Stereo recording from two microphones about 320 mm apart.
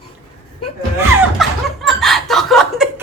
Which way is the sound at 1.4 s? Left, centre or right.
Centre.